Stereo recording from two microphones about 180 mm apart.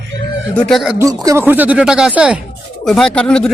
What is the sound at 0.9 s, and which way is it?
Speech, 20° right (ahead or behind).